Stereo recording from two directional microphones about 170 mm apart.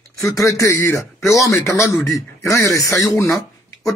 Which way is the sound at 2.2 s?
15° left (ahead or behind).